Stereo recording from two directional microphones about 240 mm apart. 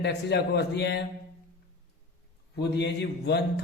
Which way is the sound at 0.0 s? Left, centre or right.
Left.